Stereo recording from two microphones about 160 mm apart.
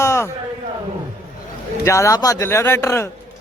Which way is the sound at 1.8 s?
20° left (ahead or behind).